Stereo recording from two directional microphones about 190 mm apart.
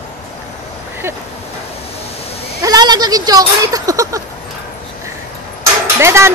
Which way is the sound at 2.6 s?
20° right (ahead or behind).